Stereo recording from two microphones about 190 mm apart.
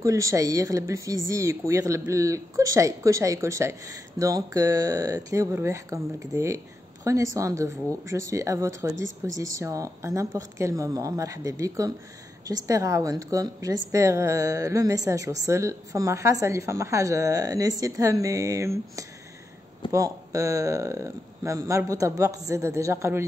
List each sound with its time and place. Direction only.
0.0 s speech: 15° right (ahead or behind)